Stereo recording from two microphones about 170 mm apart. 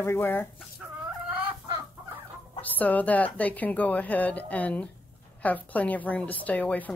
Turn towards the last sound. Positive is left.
turn(degrees=10)  # may be behind; listen again after turning